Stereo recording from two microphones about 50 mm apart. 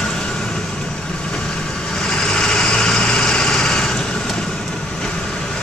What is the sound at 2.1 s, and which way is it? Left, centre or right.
Vehicle, centre.